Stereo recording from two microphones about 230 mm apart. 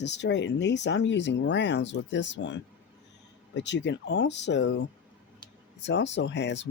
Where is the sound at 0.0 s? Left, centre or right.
Left.